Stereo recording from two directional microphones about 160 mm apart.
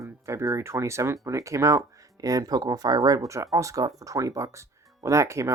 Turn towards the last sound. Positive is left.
turn(degrees=-20)  # may be behind; listen again after turning